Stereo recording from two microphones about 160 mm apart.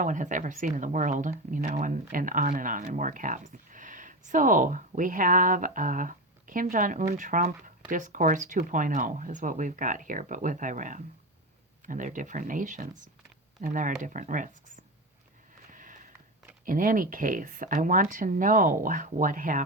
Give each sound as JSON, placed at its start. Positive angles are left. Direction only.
{"t": 0.0, "sound": "speech", "side_deg": -50}
{"t": 15.7, "sound": "sniff", "side_deg": -55}
{"t": 16.6, "sound": "speech", "side_deg": -55}